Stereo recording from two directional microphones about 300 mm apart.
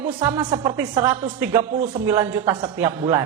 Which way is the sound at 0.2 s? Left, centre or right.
Centre.